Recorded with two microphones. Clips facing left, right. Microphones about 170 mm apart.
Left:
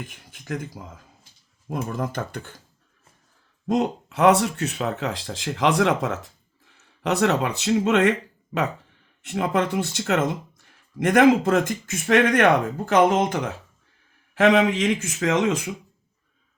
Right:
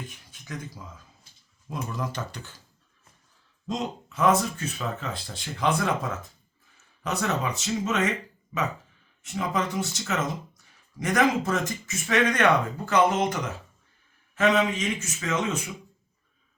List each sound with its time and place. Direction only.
0.1 s speech: 55° left (ahead or behind)
3.7 s speech: 60° left (ahead or behind)
9.2 s speech: 65° left (ahead or behind)
14.3 s speech: 70° left (ahead or behind)